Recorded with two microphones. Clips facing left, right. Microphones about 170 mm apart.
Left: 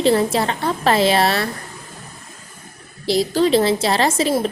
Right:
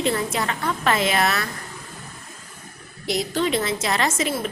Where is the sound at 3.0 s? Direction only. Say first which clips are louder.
Left 6 dB; 35° left (ahead or behind).